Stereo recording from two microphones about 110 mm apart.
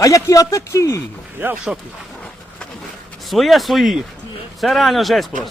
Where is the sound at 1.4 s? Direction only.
20° right (ahead or behind).